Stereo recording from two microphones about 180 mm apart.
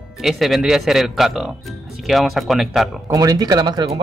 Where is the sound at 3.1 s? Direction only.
20° right (ahead or behind).